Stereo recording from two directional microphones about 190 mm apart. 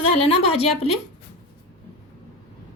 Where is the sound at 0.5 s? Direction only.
35° left (ahead or behind).